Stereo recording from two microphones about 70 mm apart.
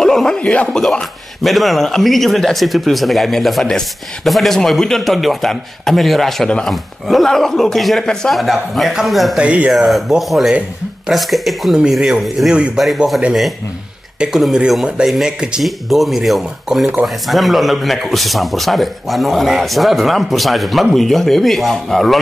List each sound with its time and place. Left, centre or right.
0.0 s a sound: centre
0.4 s speech: centre
1.4 s a man's voice: centre
9.4 s speech: centre
9.7 s a man's voice: centre
14.2 s a man's voice: centre